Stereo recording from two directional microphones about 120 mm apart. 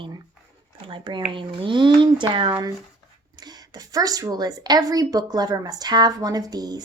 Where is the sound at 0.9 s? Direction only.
45° right (ahead or behind).